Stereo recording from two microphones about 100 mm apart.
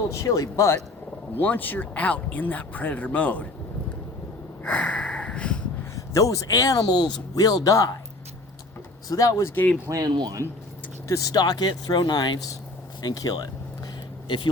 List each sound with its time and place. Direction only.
0.1 s speech: 30° left (ahead or behind)
1.4 s speech: 20° left (ahead or behind)
4.6 s sniff: 10° left (ahead or behind)
6.1 s speech: 35° left (ahead or behind)
9.0 s speech: 35° left (ahead or behind)
9.9 s speech: 40° right (ahead or behind)
11.1 s speech: 35° left (ahead or behind)